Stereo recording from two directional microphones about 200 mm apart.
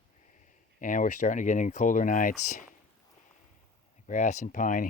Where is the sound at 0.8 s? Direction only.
40° left (ahead or behind).